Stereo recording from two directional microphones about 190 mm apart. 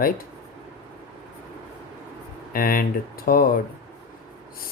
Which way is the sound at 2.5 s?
50° left (ahead or behind).